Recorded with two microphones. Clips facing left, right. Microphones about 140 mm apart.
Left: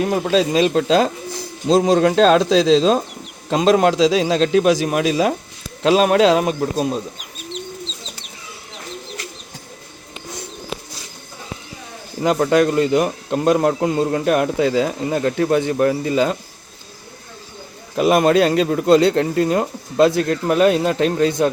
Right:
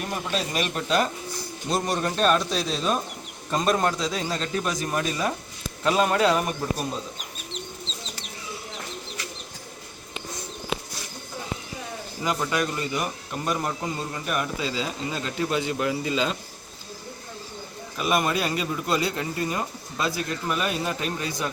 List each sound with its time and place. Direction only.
0.0 s speech: 90° left
12.2 s speech: 55° left (ahead or behind)
17.9 s speech: 60° left (ahead or behind)